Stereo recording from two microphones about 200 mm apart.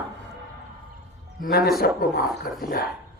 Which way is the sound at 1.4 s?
50° left (ahead or behind).